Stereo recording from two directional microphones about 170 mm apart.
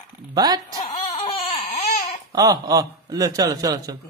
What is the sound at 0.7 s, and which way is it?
Baby cry, 30° left (ahead or behind).